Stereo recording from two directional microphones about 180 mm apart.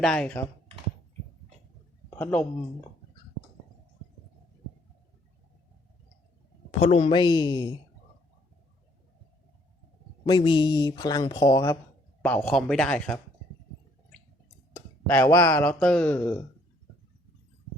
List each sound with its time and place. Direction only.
0.0 s speech: 5° left (ahead or behind)
2.0 s speech: 10° left (ahead or behind)
6.7 s speech: 35° left (ahead or behind)
7.2 s speech: 25° left (ahead or behind)
10.2 s speech: 25° left (ahead or behind)
12.2 s speech: 5° left (ahead or behind)
14.8 s a sound: 10° left (ahead or behind)
15.3 s a man's voice: 15° left (ahead or behind)